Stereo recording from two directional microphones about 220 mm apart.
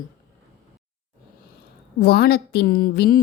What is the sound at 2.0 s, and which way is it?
A woman's voice, 45° left (ahead or behind).